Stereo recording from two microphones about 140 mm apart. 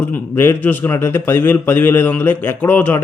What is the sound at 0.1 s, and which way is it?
A man's voice, 15° left (ahead or behind).